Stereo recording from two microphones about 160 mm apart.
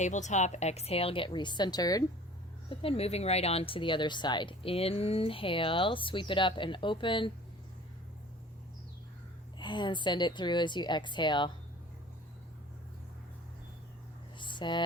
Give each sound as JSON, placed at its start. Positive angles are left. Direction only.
{"t": 0.0, "sound": "speech", "side_deg": 50}
{"t": 2.6, "sound": "speech", "side_deg": 35}
{"t": 9.6, "sound": "a woman's voice", "side_deg": 30}
{"t": 14.3, "sound": "a sound", "side_deg": 30}